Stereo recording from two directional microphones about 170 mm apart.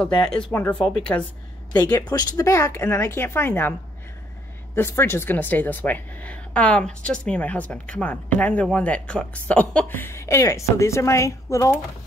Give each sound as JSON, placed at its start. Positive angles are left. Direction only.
{"t": 0.5, "sound": "speech", "side_deg": 10}
{"t": 4.7, "sound": "speech", "side_deg": 15}